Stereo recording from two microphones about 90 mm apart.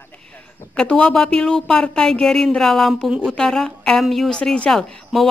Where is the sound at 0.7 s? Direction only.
10° left (ahead or behind).